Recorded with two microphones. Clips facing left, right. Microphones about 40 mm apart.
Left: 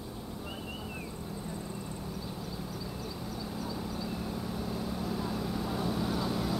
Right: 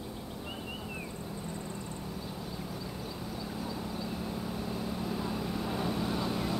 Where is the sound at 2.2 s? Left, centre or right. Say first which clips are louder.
Even; centre.